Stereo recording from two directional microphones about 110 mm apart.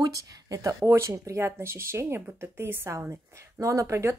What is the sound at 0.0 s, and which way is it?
Speech, 30° right (ahead or behind).